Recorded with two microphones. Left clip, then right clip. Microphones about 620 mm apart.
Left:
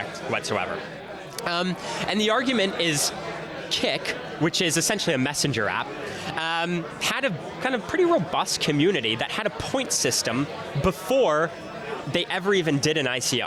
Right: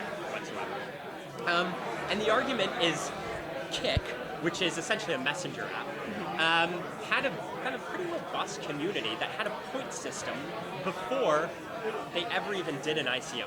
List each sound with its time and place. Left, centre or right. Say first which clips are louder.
2.0 s speech: left 5 dB; left